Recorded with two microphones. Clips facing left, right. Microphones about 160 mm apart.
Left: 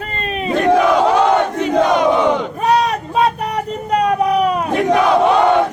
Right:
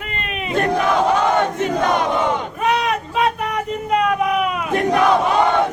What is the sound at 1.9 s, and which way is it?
Crowd, 50° right (ahead or behind).